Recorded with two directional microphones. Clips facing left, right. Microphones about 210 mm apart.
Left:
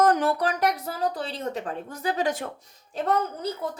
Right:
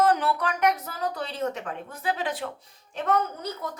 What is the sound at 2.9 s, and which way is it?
Speech, 30° left (ahead or behind).